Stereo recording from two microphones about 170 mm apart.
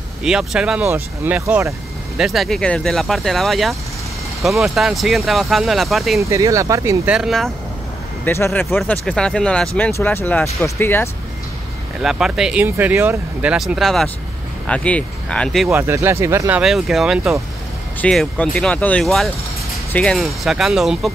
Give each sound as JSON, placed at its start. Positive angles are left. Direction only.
{"t": 0.2, "sound": "speech", "side_deg": -5}
{"t": 2.1, "sound": "speech", "side_deg": 0}
{"t": 6.2, "sound": "speech", "side_deg": -20}
{"t": 7.1, "sound": "speech", "side_deg": 0}
{"t": 12.0, "sound": "speech", "side_deg": -5}
{"t": 15.7, "sound": "speech", "side_deg": -15}